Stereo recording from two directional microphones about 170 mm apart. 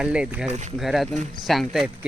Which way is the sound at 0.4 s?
40° right (ahead or behind).